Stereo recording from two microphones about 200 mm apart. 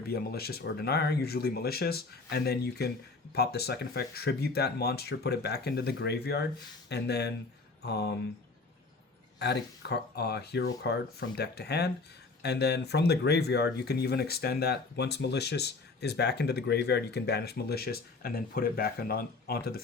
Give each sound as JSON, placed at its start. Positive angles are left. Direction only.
{"t": 0.1, "sound": "speech", "side_deg": 50}
{"t": 9.4, "sound": "speech", "side_deg": 55}